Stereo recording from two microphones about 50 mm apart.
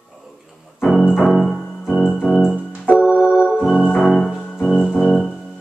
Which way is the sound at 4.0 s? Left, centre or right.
Centre.